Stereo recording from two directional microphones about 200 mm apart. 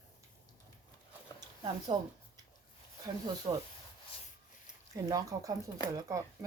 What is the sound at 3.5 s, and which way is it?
Speech, 30° right (ahead or behind).